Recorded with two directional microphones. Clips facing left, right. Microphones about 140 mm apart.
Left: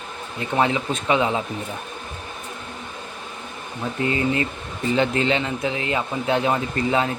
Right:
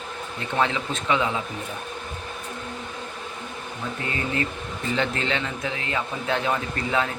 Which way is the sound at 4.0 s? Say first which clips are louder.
Left 6 dB; 20° left (ahead or behind).